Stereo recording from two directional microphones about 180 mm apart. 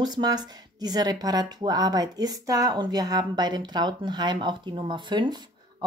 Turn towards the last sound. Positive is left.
turn(degrees=-25)  # may be behind; listen again after turning